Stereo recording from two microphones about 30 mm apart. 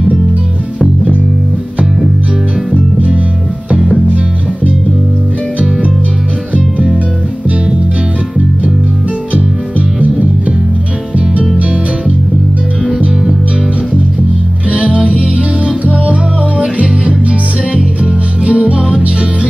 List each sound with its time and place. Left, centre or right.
9.3 s music: right
14.7 s music: right
18.4 s music: right